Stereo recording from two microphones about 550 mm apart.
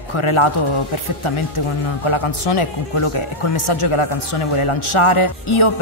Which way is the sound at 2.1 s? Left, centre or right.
Left.